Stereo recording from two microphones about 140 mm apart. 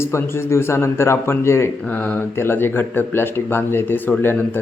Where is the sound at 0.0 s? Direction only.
15° left (ahead or behind).